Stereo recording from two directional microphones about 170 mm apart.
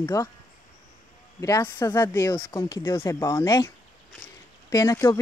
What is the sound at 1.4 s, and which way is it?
Speech, 15° left (ahead or behind).